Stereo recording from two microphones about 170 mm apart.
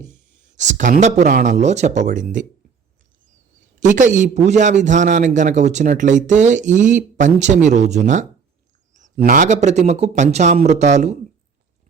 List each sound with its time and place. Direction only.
0.0 s a man's voice: 45° right (ahead or behind)
3.8 s a man's voice: 45° right (ahead or behind)